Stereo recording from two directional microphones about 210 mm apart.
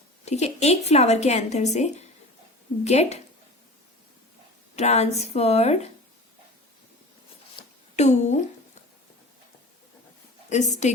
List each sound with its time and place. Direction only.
0.3 s a woman's voice: 30° left (ahead or behind)
4.7 s a woman's voice: 30° left (ahead or behind)
7.5 s a sound: 30° left (ahead or behind)
10.5 s a woman's voice: 35° left (ahead or behind)